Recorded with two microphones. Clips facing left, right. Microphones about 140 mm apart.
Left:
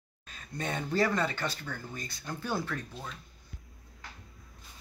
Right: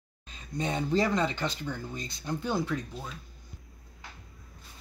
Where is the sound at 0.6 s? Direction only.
20° right (ahead or behind).